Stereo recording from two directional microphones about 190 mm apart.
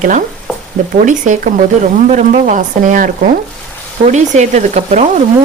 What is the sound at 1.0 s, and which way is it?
Speech, 40° right (ahead or behind).